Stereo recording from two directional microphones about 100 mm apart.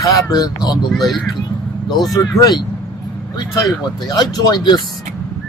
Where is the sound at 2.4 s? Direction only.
45° left (ahead or behind).